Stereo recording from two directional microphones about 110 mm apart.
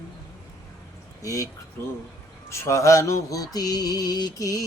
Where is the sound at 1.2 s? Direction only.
30° left (ahead or behind).